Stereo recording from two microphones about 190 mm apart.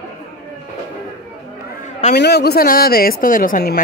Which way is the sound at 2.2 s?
60° left (ahead or behind).